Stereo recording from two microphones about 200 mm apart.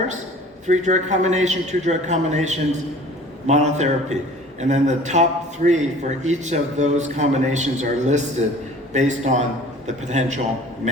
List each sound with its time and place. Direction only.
0.7 s a man's voice: 35° right (ahead or behind)